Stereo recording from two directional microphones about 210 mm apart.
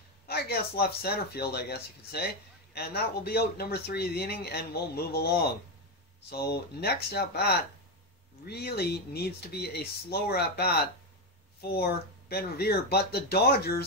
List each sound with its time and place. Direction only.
0.3 s speech: 50° left (ahead or behind)